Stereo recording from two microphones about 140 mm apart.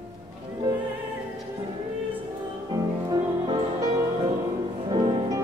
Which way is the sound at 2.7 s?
30° right (ahead or behind).